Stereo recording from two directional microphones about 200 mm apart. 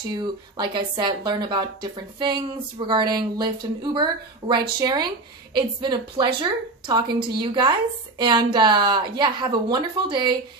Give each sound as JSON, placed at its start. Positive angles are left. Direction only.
{"t": 0.6, "sound": "speech", "side_deg": -20}